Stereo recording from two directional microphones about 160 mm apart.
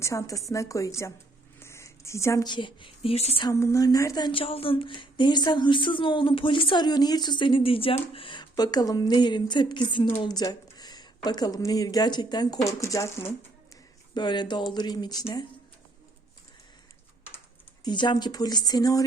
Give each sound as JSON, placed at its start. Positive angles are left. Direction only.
{"t": 0.0, "sound": "speech", "side_deg": 20}
{"t": 3.4, "sound": "speech", "side_deg": 20}
{"t": 14.1, "sound": "speech", "side_deg": 30}
{"t": 17.8, "sound": "speech", "side_deg": 30}